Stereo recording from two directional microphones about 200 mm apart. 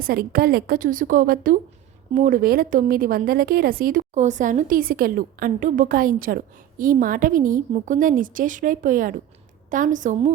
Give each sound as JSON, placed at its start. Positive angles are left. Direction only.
{"t": 0.0, "sound": "a woman's voice", "side_deg": -50}